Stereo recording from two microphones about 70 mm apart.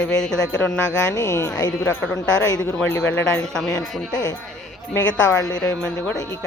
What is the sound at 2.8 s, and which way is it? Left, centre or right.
Speech, left.